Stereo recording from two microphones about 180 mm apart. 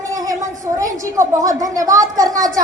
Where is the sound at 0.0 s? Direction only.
20° right (ahead or behind).